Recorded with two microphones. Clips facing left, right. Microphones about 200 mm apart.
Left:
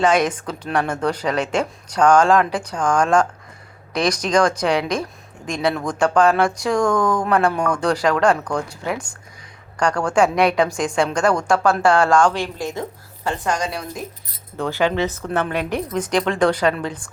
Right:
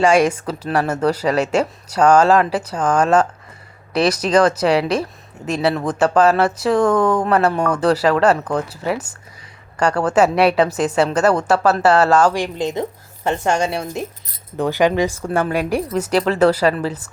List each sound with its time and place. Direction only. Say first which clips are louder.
0.0 s a woman's voice: right 3 dB; 10° right (ahead or behind); by 13.8 s 25° right (ahead or behind)
14.5 s speech: right 4 dB; 15° right (ahead or behind)